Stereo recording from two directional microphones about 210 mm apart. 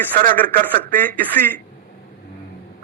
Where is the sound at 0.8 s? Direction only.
10° left (ahead or behind).